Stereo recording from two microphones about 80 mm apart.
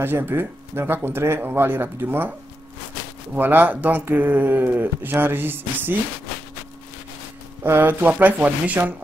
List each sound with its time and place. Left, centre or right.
0.0 s speech: right
3.3 s speech: right
7.6 s speech: right